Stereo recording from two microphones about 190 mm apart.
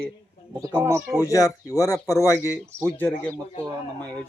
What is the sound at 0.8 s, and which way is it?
Speech, 15° right (ahead or behind).